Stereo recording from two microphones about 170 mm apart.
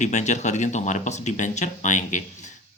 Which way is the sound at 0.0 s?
45° left (ahead or behind).